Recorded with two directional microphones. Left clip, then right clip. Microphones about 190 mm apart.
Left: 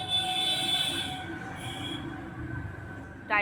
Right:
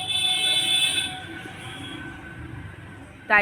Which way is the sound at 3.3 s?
25° right (ahead or behind).